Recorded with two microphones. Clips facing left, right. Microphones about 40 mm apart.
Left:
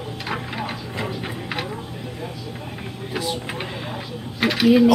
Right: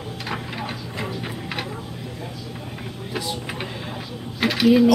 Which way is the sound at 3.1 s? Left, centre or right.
Centre.